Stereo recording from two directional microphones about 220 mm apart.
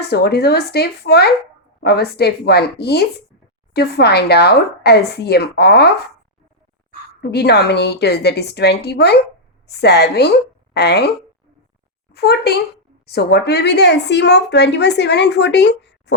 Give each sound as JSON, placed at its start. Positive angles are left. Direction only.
{"t": 0.0, "sound": "speech", "side_deg": 50}
{"t": 7.2, "sound": "speech", "side_deg": 50}
{"t": 12.1, "sound": "speech", "side_deg": 45}